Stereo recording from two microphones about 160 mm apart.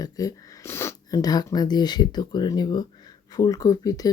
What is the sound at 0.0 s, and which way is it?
Speech, 20° left (ahead or behind).